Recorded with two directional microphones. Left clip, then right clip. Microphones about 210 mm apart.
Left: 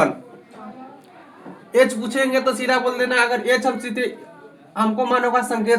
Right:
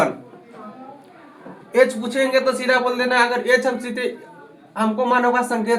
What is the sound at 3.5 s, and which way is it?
Speech, 35° left (ahead or behind).